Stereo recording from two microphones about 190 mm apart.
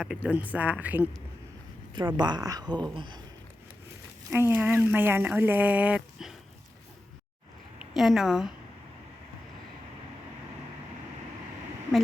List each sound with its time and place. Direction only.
0.0 s speech: 5° right (ahead or behind)
2.0 s speech: 25° right (ahead or behind)
4.3 s speech: 10° right (ahead or behind)
7.8 s speech: centre (ahead or behind)